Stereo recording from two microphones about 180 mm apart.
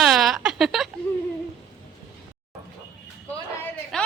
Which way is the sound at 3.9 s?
5° left (ahead or behind).